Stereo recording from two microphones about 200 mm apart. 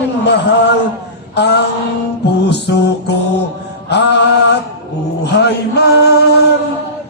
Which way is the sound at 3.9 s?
60° left (ahead or behind).